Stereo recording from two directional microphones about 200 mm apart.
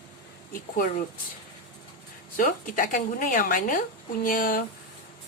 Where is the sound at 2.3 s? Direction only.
40° left (ahead or behind).